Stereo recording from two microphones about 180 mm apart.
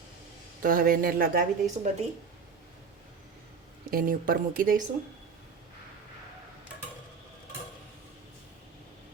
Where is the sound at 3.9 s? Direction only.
50° right (ahead or behind).